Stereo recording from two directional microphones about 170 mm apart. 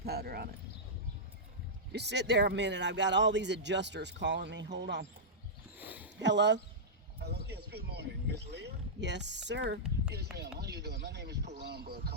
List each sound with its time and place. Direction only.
0.0 s a sound: 65° right (ahead or behind)
1.9 s speech: 85° right
5.7 s a sound: 10° right (ahead or behind)
6.1 s speech: 90° right
7.2 s speech: 70° right (ahead or behind); by 9.8 s 90° right
10.2 s speech: 75° right (ahead or behind)